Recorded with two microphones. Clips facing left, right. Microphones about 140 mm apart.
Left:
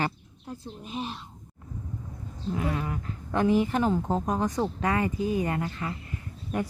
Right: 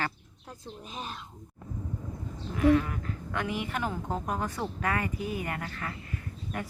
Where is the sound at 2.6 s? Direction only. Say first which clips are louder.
Right 9 dB; 20° left (ahead or behind).